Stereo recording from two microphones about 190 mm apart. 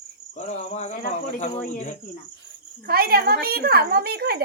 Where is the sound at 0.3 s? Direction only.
35° left (ahead or behind).